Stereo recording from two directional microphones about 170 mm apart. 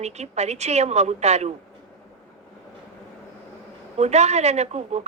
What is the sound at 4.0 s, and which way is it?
A woman's voice, 40° right (ahead or behind).